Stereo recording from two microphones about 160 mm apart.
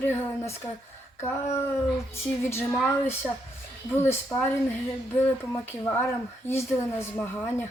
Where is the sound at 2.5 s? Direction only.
15° left (ahead or behind).